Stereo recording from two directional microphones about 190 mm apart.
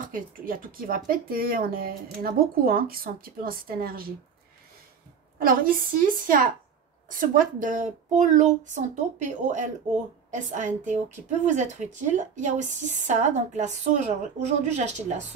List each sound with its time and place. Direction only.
0.0 s speech: 45° right (ahead or behind)
5.4 s a woman's voice: 50° right (ahead or behind)